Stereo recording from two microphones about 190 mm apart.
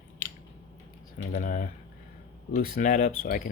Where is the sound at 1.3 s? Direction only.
45° left (ahead or behind).